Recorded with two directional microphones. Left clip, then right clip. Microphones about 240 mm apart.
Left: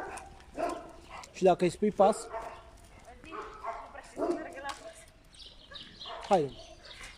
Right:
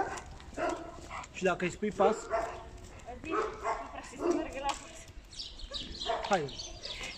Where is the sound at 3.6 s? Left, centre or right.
Right.